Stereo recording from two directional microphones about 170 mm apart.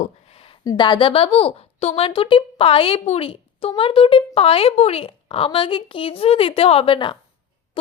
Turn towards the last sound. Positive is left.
turn(degrees=30)  # may be behind; listen again after turning